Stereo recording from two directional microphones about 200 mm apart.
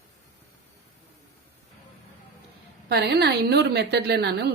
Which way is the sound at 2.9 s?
55° right (ahead or behind).